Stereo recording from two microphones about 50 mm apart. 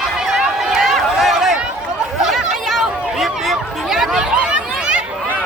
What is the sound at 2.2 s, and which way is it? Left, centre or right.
Chatter, centre.